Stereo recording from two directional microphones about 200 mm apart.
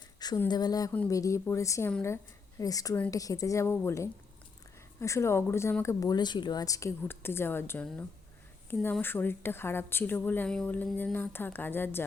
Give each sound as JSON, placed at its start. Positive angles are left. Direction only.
{"t": 0.2, "sound": "a woman's voice", "side_deg": 20}